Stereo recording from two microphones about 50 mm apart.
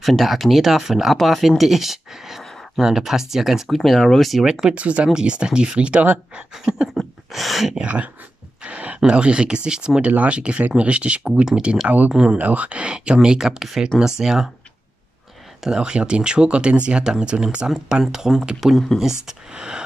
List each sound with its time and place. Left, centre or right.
0.0 s speech: centre
4.5 s speech: centre
4.7 s speech: right
6.5 s speech: centre
7.0 s a sound: centre
7.8 s speech: right
10.0 s speech: right
12.1 s speech: centre
12.4 s speech: right; by 14.5 s centre
15.6 s speech: centre
18.6 s speech: centre
19.2 s speech: centre